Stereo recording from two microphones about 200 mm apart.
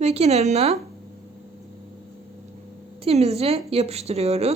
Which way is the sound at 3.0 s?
30° right (ahead or behind).